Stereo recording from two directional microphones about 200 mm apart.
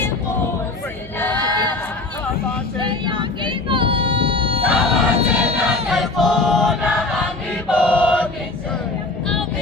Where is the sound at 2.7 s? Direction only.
25° right (ahead or behind).